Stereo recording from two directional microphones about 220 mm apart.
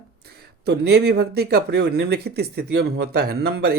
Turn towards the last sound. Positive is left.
turn(degrees=-45)  # may be behind; listen again after turning